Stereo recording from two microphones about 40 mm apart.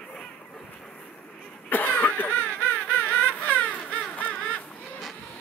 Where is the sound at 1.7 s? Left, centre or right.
Left.